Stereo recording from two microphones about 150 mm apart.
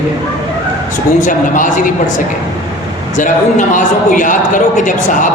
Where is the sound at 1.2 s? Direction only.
60° left (ahead or behind).